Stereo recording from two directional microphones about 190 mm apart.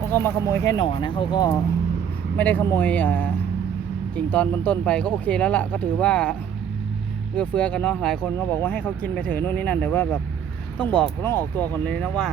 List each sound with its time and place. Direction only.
0.0 s speech: 10° left (ahead or behind)
7.3 s speech: 5° left (ahead or behind)